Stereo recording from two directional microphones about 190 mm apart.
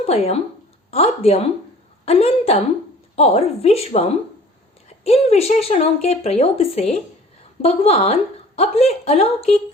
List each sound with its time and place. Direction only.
0.0 s speech: 30° left (ahead or behind)